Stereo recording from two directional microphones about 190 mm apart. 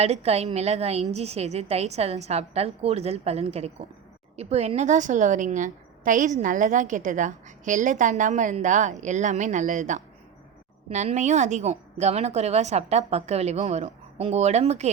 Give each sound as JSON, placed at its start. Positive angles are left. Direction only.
{"t": 0.0, "sound": "a woman's voice", "side_deg": -35}